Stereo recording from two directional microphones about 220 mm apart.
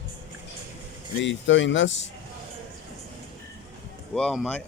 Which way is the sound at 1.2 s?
55° left (ahead or behind).